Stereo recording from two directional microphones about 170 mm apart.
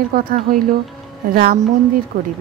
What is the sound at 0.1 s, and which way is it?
Speech, 55° right (ahead or behind).